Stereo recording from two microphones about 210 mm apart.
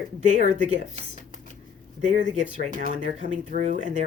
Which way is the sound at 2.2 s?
35° right (ahead or behind).